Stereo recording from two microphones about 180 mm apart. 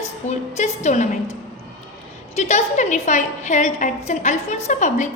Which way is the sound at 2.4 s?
40° left (ahead or behind).